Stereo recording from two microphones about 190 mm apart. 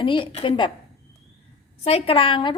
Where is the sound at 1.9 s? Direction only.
30° left (ahead or behind).